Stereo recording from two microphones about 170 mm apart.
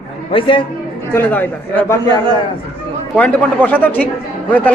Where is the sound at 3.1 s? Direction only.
10° left (ahead or behind).